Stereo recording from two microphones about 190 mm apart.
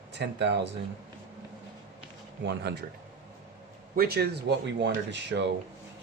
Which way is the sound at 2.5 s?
60° right (ahead or behind).